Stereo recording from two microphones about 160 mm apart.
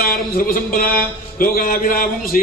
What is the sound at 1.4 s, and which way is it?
A man's voice, 60° left (ahead or behind).